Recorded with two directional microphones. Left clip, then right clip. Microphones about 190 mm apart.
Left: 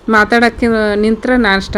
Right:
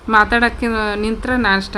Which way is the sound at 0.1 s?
15° left (ahead or behind).